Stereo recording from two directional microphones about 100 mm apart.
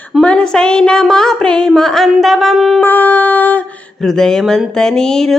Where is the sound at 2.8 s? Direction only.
20° left (ahead or behind).